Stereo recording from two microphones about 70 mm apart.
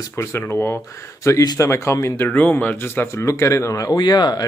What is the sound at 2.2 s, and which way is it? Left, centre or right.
Speech, left.